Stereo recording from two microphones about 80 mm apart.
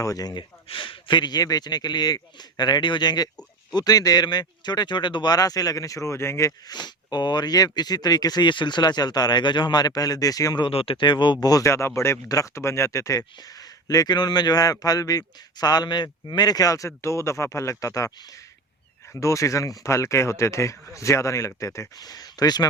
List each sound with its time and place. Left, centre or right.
0.0 s speech: left
3.8 s speech: left
6.7 s speech: left
10.6 s speech: left
11.4 s speech: left
11.7 s speech: left
19.1 s speech: left